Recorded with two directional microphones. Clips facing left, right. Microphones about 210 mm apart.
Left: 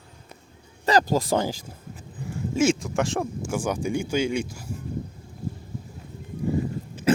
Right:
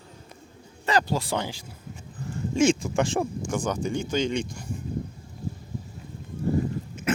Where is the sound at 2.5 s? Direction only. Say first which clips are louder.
Right 1 dB; 5° left (ahead or behind).